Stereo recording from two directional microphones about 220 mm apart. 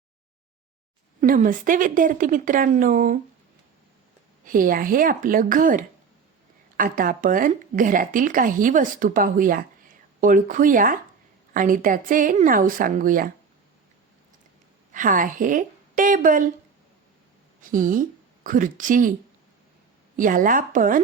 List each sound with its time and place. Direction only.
1.2 s speech: 35° right (ahead or behind)
4.4 s speech: 40° right (ahead or behind)
14.9 s speech: 35° right (ahead or behind)
17.6 s a woman's voice: 35° right (ahead or behind)
20.1 s speech: 35° right (ahead or behind)